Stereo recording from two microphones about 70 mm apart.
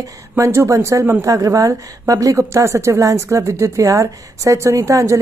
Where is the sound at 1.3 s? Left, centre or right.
Right.